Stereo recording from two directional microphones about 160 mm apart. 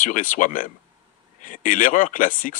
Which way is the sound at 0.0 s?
55° left (ahead or behind).